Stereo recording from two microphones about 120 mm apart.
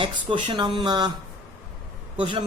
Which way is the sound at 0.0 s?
50° right (ahead or behind).